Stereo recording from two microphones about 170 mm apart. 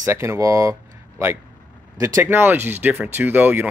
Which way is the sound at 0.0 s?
15° right (ahead or behind).